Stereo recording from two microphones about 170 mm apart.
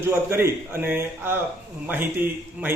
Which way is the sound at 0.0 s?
15° right (ahead or behind).